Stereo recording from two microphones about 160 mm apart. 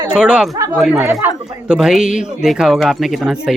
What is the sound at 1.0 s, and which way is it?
Speech, 15° right (ahead or behind).